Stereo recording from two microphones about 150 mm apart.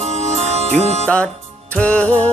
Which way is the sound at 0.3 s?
45° right (ahead or behind).